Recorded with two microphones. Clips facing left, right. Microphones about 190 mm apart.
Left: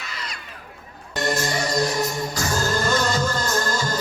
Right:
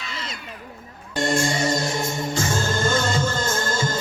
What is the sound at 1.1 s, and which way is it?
Music, 30° right (ahead or behind).